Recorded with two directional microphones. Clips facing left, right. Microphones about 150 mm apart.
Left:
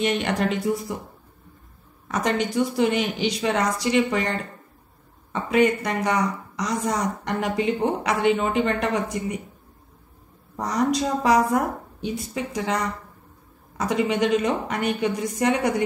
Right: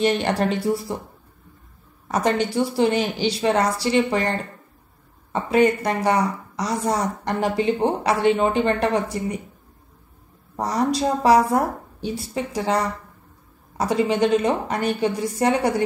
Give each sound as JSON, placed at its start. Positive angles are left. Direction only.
{"t": 0.0, "sound": "a woman's voice", "side_deg": -30}
{"t": 2.0, "sound": "a woman's voice", "side_deg": -30}
{"t": 5.3, "sound": "a woman's voice", "side_deg": -35}
{"t": 10.5, "sound": "a woman's voice", "side_deg": -30}